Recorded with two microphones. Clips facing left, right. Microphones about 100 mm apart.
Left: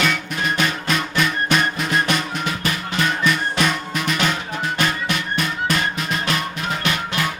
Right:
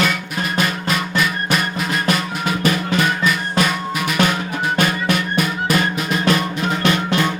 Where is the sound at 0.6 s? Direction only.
5° right (ahead or behind).